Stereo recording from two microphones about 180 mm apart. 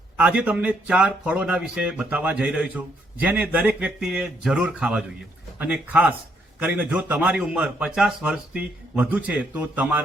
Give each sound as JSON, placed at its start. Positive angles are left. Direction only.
{"t": 0.2, "sound": "a man's voice", "side_deg": -5}